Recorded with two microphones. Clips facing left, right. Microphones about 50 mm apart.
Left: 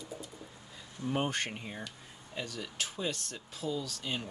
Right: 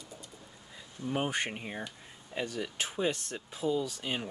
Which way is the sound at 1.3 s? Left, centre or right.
Centre.